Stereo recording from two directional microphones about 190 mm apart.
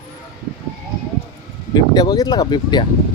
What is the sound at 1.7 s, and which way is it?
Speech, 20° left (ahead or behind).